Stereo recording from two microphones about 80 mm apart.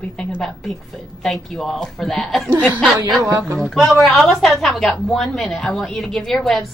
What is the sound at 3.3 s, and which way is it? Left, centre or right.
Speech, right.